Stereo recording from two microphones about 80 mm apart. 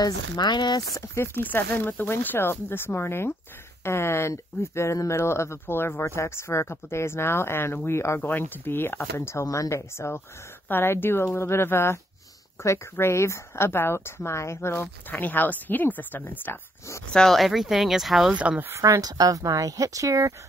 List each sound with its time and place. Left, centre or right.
0.0 s speech: left
0.9 s speech: left
17.1 s speech: centre
18.3 s speech: centre
18.7 s speech: right